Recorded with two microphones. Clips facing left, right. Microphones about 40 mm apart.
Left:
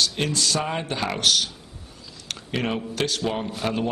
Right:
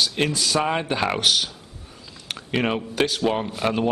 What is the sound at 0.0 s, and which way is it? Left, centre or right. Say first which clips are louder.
A man's voice: right 1 dB; centre.